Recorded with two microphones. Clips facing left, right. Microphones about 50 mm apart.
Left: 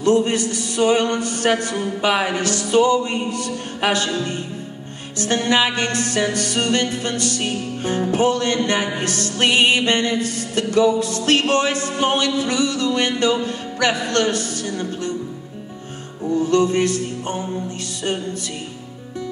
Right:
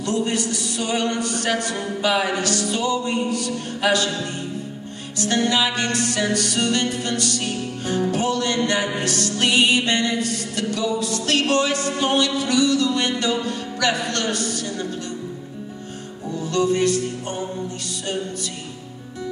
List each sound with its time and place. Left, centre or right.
0.0 s music: left
16.3 s music: left